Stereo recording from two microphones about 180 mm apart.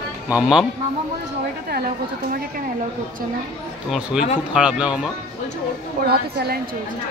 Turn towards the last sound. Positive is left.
turn(degrees=-60)  # may be behind; listen again after turning